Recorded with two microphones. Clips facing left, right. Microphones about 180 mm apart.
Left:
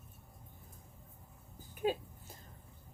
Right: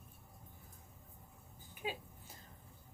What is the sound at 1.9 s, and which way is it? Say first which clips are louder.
Speech: left 9 dB; 45° left (ahead or behind).